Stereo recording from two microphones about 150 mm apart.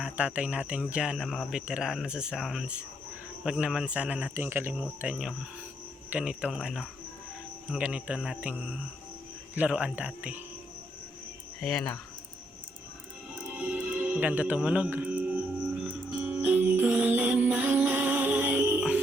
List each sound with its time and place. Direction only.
0.0 s speech: 5° right (ahead or behind)
11.6 s speech: 5° left (ahead or behind)
13.4 s music: 10° right (ahead or behind)